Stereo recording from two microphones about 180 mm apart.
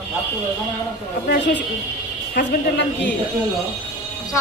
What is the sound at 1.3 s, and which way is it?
Speech, 75° left (ahead or behind).